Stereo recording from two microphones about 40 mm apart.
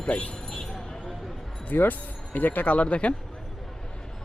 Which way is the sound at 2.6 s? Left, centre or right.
Left.